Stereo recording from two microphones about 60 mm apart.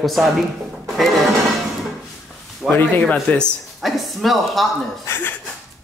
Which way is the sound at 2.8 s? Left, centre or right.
Left.